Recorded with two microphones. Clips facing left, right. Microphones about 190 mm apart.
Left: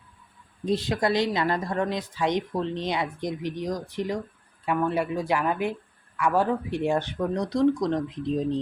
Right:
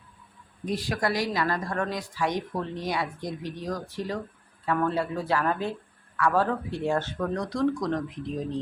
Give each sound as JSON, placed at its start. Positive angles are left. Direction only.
{"t": 0.6, "sound": "speech", "side_deg": 25}